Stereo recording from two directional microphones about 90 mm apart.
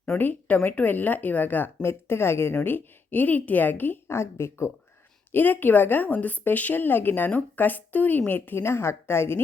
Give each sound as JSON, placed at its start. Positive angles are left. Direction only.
{"t": 0.0, "sound": "a woman's voice", "side_deg": 20}